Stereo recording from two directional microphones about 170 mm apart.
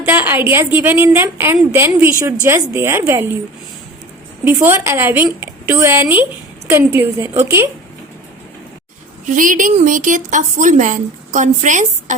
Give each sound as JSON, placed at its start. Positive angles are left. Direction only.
{"t": 0.0, "sound": "a woman's voice", "side_deg": -15}
{"t": 4.4, "sound": "a woman's voice", "side_deg": -15}
{"t": 9.2, "sound": "a woman's voice", "side_deg": -50}